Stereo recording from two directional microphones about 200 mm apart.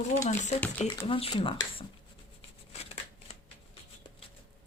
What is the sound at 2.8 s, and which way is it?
Shuffling cards, 30° left (ahead or behind).